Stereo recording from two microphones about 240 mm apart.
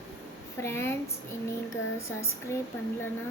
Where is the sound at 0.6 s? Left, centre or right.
Centre.